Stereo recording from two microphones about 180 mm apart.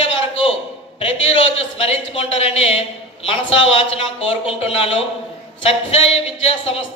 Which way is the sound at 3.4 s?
90° left.